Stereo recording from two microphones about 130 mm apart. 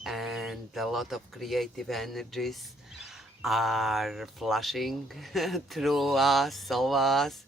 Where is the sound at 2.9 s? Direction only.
Centre (ahead or behind).